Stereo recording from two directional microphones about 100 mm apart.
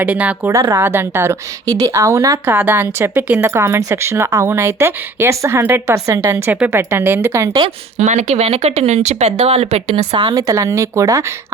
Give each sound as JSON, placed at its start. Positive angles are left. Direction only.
{"t": 0.0, "sound": "speech", "side_deg": -15}
{"t": 0.5, "sound": "speech", "side_deg": -30}
{"t": 1.6, "sound": "speech", "side_deg": -35}
{"t": 2.5, "sound": "speech", "side_deg": -20}
{"t": 3.4, "sound": "speech", "side_deg": -25}
{"t": 7.9, "sound": "speech", "side_deg": -90}
{"t": 10.2, "sound": "speech", "side_deg": -45}